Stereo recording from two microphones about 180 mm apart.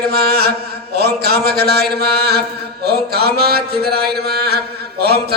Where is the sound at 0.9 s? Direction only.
60° right (ahead or behind).